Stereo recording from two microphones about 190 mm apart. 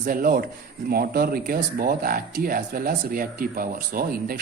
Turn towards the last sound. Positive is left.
turn(degrees=-50)  # may be behind; listen again after turning